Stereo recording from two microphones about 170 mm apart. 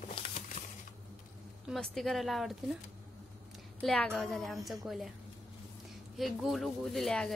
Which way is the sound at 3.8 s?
5° left (ahead or behind).